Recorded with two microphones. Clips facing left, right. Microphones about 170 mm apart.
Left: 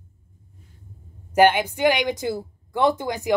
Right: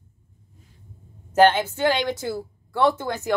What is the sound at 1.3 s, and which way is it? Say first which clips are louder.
A woman's voice: even; 15° left (ahead or behind).